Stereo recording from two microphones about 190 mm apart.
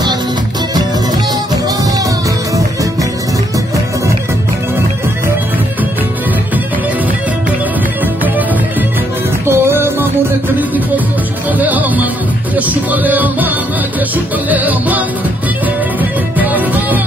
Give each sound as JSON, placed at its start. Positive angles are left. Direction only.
{"t": 2.5, "sound": "music", "side_deg": -15}
{"t": 8.0, "sound": "music", "side_deg": -10}
{"t": 9.5, "sound": "music", "side_deg": -10}
{"t": 11.5, "sound": "music", "side_deg": -10}